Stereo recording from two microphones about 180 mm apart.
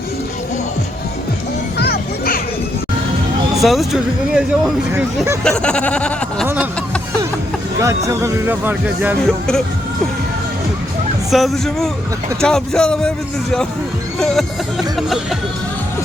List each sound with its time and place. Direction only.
1.8 s music: 55° left (ahead or behind)
3.6 s speech: centre (ahead or behind)
5.4 s speech: 5° left (ahead or behind)
7.8 s speech: 15° right (ahead or behind)
11.3 s speech: centre (ahead or behind)